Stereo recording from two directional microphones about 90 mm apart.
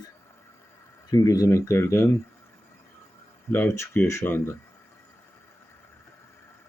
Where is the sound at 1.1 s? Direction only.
45° left (ahead or behind); by 2.0 s 30° left (ahead or behind).